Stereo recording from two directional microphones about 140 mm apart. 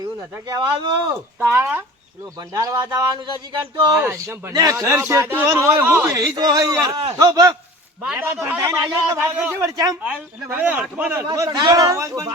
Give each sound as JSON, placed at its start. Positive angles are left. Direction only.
{"t": 0.4, "sound": "speech", "side_deg": -30}
{"t": 1.1, "sound": "a man's voice", "side_deg": -15}
{"t": 2.5, "sound": "a man's voice", "side_deg": -25}
{"t": 3.9, "sound": "a man's voice", "side_deg": -15}
{"t": 9.2, "sound": "a man's voice", "side_deg": -10}
{"t": 10.0, "sound": "a man's voice", "side_deg": -10}
{"t": 11.3, "sound": "a man's voice", "side_deg": -25}